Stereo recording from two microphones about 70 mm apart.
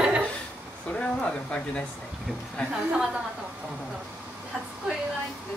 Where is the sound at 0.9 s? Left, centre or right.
Centre.